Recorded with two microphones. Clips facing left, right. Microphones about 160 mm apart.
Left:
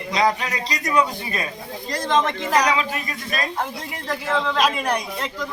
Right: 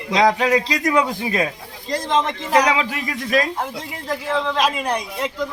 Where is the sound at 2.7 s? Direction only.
90° right.